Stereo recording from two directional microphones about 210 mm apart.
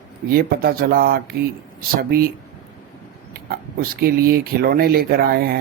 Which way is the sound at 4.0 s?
45° right (ahead or behind).